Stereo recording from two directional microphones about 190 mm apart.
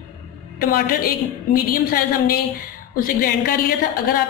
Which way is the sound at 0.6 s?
50° left (ahead or behind).